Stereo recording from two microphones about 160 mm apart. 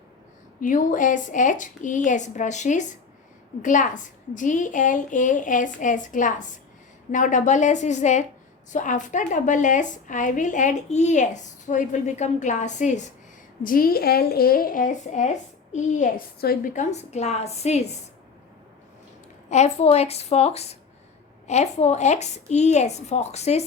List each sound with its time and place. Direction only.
0.6 s a woman's voice: 55° left (ahead or behind)
13.6 s speech: 65° left (ahead or behind)
16.7 s a woman's voice: 45° left (ahead or behind)
19.5 s a woman's voice: 45° left (ahead or behind)